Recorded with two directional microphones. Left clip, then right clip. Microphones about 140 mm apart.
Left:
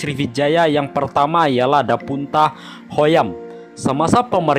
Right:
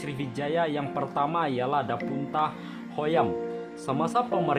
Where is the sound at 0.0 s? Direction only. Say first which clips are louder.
Left 13 dB; 50° left (ahead or behind).